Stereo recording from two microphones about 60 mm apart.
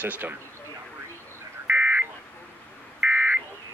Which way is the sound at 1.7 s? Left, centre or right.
Right.